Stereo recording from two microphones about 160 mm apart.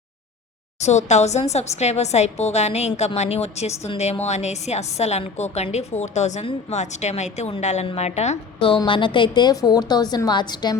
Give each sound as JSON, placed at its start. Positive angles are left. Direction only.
{"t": 0.8, "sound": "speech", "side_deg": 45}